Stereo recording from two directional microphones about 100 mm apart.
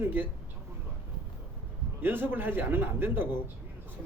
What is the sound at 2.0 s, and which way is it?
Speech, 20° right (ahead or behind).